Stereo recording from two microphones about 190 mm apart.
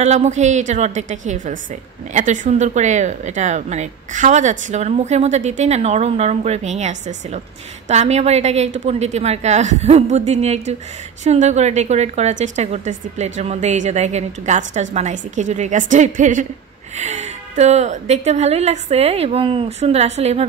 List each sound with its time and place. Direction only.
0.0 s a woman's voice: 35° right (ahead or behind)